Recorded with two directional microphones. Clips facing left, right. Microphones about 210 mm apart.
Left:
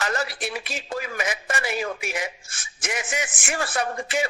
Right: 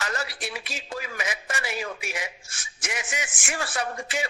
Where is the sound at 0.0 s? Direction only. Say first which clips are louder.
Left 5 dB; 50° left (ahead or behind).